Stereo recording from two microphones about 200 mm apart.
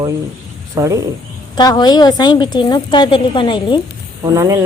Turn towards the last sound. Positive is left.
turn(degrees=-15)  # may be behind; listen again after turning